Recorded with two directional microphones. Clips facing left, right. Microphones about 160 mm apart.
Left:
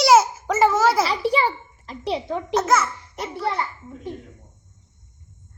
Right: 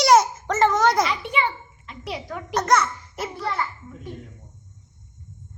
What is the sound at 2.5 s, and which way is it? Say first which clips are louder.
Speech: even; 5° left (ahead or behind).